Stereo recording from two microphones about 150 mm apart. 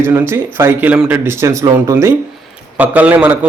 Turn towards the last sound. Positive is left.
turn(degrees=-10)  # may be behind; listen again after turning